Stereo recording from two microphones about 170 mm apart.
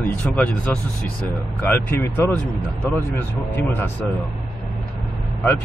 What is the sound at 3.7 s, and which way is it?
Speech, 10° left (ahead or behind).